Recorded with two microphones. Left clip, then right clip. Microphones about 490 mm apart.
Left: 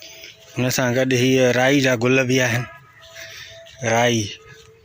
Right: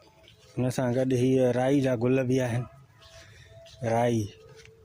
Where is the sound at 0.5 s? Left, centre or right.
Right.